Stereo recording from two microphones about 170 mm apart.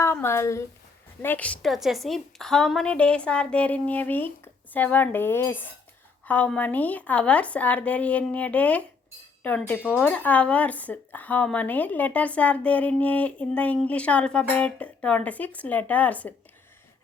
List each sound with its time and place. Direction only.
0.0 s speech: 15° left (ahead or behind)